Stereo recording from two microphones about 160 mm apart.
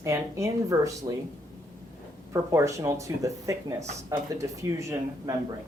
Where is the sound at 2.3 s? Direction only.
20° right (ahead or behind).